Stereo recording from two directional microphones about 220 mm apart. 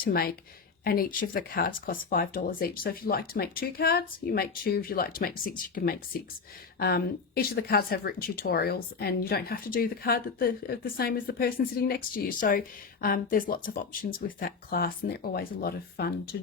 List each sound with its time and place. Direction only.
0.0 s speech: 45° left (ahead or behind)